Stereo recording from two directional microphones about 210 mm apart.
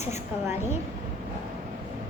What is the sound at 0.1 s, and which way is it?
Speech, 10° right (ahead or behind).